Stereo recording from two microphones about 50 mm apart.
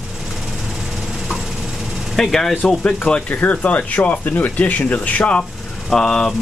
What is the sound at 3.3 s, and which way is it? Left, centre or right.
Speech, left.